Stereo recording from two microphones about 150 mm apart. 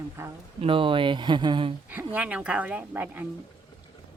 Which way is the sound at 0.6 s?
35° right (ahead or behind).